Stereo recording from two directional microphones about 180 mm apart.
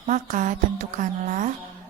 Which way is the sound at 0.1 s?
45° right (ahead or behind).